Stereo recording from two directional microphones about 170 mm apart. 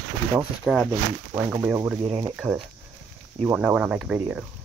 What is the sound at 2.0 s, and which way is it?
Speech, 30° right (ahead or behind).